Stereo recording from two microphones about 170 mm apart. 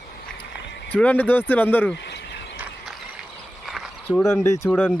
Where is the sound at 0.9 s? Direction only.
10° left (ahead or behind).